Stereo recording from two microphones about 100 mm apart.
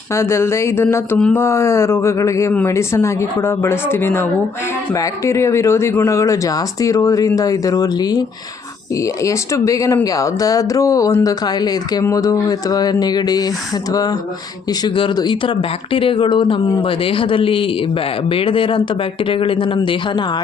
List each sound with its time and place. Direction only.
0.1 s speech: 25° left (ahead or behind); by 20.2 s 55° left (ahead or behind)